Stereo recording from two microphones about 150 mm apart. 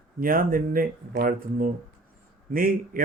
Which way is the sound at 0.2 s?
70° right (ahead or behind).